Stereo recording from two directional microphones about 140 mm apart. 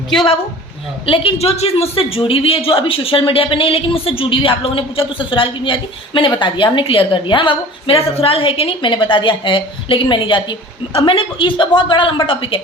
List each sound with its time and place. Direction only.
1.0 s a woman's voice: 40° left (ahead or behind)